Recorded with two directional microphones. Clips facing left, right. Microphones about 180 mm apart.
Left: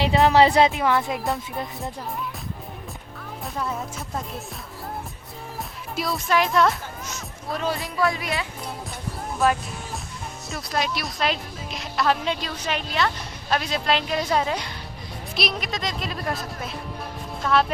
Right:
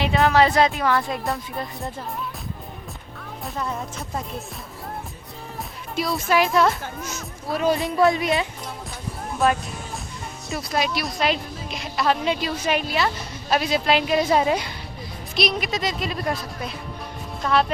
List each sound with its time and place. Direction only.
0.3 s speech: 30° left (ahead or behind)
0.9 s speech: 5° left (ahead or behind)
3.4 s music: centre (ahead or behind)
6.0 s speech: centre (ahead or behind)
7.9 s speech: 25° right (ahead or behind)
9.4 s a woman's voice: centre (ahead or behind)
15.4 s speech: centre (ahead or behind)